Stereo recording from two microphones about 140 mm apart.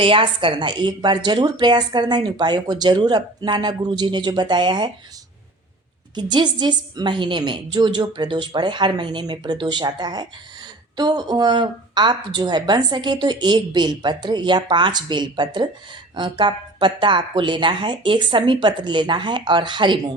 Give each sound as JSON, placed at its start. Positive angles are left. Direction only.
{"t": 0.0, "sound": "a woman's voice", "side_deg": -40}
{"t": 6.1, "sound": "a woman's voice", "side_deg": -30}